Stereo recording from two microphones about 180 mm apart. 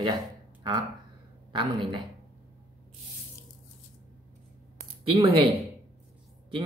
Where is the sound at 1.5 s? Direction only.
25° right (ahead or behind).